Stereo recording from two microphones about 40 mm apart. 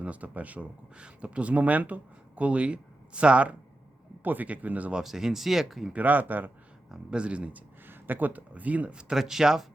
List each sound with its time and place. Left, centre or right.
0.0 s speech: right
4.2 s speech: right
5.0 s speech: centre
5.9 s speech: right
6.9 s speech: right
7.9 s speech: right
8.9 s speech: right
9.1 s speech: centre